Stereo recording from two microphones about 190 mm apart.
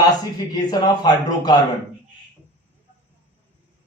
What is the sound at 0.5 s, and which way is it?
A man's voice, 20° left (ahead or behind).